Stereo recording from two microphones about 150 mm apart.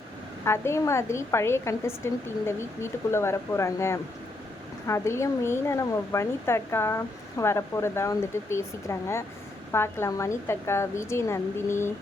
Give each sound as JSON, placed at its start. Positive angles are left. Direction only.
{"t": 0.4, "sound": "a woman's voice", "side_deg": 20}